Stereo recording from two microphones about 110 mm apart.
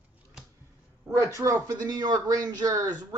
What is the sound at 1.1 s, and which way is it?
Speech, 30° right (ahead or behind).